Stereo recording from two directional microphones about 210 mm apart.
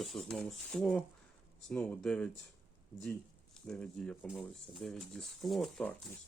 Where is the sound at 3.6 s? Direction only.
5° left (ahead or behind).